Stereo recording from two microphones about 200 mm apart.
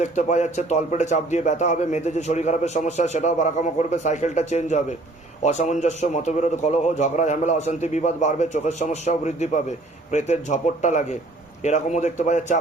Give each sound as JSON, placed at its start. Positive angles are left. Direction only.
{"t": 0.0, "sound": "a man's voice", "side_deg": 35}